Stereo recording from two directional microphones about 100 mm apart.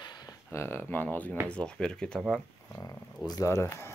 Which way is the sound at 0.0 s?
45° left (ahead or behind).